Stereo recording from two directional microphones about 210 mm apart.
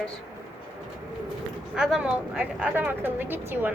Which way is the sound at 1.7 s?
5° right (ahead or behind).